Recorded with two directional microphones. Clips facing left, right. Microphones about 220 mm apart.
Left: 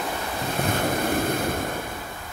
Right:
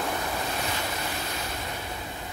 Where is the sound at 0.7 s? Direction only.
50° left (ahead or behind).